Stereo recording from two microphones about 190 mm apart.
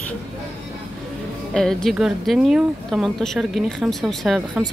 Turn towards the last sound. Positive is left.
turn(degrees=0)  # may be behind; listen again after turning